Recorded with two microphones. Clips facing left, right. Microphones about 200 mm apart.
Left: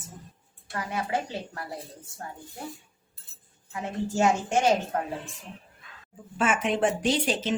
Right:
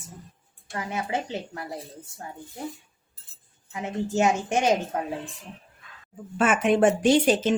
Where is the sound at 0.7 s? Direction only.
20° right (ahead or behind).